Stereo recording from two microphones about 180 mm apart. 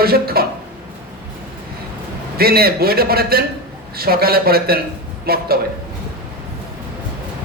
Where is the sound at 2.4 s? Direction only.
60° right (ahead or behind).